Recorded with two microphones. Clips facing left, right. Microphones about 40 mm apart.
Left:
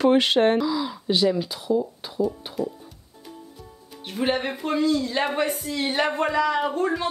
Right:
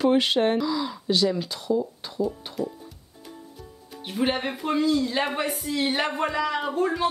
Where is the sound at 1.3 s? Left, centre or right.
Centre.